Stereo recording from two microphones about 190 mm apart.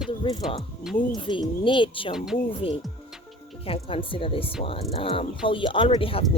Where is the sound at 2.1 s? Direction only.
5° right (ahead or behind).